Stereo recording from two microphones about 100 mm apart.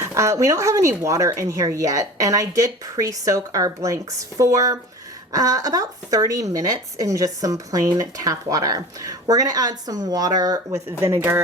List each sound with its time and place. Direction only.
0.0 s speech: 30° right (ahead or behind)
11.0 s speech: 25° right (ahead or behind)